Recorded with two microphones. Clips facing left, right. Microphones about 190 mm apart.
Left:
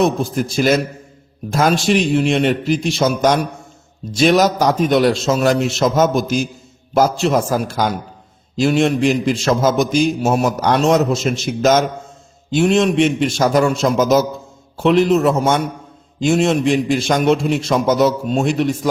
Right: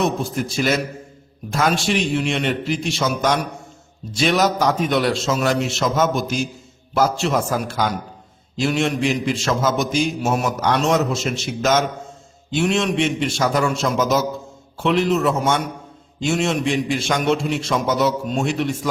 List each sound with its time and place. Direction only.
0.5 s a man's voice: 40° left (ahead or behind)